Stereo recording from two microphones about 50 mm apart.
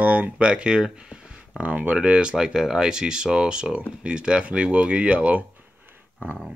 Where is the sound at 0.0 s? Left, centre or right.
Right.